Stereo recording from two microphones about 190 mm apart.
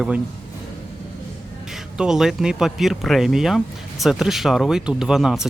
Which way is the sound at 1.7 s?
Centre (ahead or behind).